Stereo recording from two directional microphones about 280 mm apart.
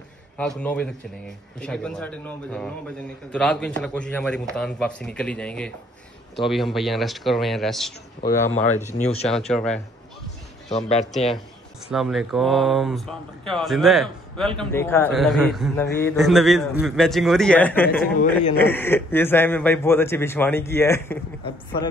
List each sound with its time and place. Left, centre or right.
0.4 s a man's voice: centre
8.5 s speech: left
9.5 s speech: centre
10.7 s speech: left
11.9 s a man's voice: centre